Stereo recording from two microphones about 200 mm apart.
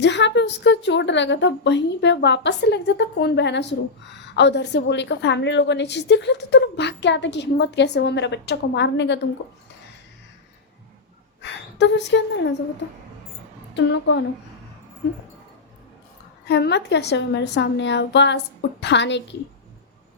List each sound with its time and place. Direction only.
0.0 s a woman's voice: 60° left (ahead or behind)
11.4 s a woman's voice: 60° left (ahead or behind)
13.7 s a woman's voice: 65° left (ahead or behind)
16.5 s a woman's voice: 55° left (ahead or behind)